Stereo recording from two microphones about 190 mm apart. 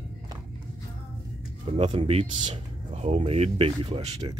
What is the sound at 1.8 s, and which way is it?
Speech, 35° right (ahead or behind).